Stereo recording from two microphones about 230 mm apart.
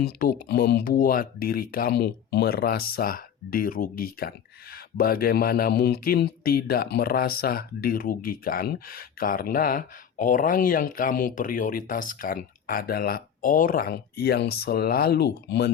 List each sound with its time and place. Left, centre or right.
0.0 s speech: left